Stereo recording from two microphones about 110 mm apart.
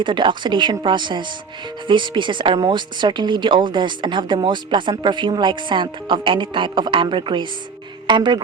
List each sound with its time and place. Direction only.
0.0 s speech: 45° right (ahead or behind)